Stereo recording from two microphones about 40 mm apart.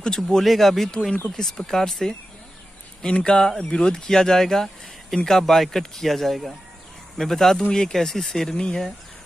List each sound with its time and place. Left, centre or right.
0.0 s speech: centre
3.0 s speech: left